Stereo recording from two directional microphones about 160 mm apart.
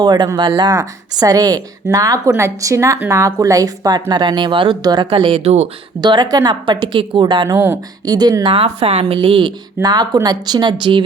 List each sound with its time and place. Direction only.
0.0 s speech: 25° right (ahead or behind)
6.0 s speech: 25° right (ahead or behind)
8.5 s speech: 40° right (ahead or behind)